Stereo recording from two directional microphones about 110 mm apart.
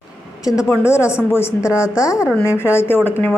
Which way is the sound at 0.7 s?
25° left (ahead or behind).